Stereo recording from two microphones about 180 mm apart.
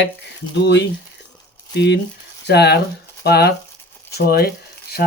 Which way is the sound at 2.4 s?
65° left (ahead or behind).